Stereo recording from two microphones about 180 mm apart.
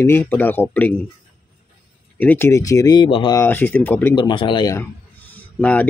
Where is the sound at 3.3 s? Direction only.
10° left (ahead or behind).